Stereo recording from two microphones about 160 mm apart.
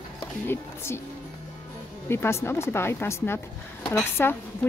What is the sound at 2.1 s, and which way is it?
Speech, 15° left (ahead or behind).